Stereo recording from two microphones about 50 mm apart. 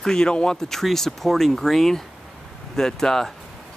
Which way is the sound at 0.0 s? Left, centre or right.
Centre.